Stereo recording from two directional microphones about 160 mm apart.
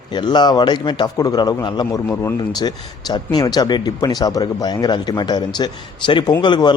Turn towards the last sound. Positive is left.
turn(degrees=25)  # may be behind; listen again after turning